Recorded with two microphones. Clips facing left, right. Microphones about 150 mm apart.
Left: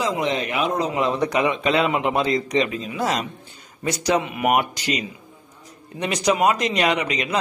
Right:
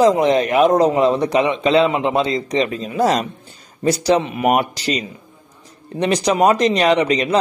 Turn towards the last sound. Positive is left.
turn(degrees=-35)  # may be behind; listen again after turning